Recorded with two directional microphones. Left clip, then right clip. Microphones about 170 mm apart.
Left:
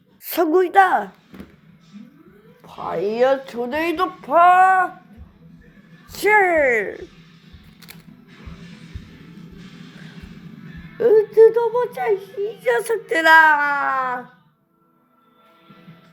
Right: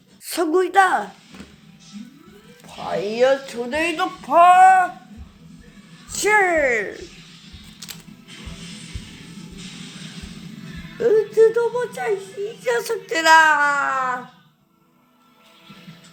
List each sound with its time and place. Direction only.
0.3 s a child's voice: 25° left (ahead or behind)
2.6 s a child's voice: 20° left (ahead or behind)
6.1 s speech: 25° left (ahead or behind)
11.0 s a child's voice: 20° left (ahead or behind)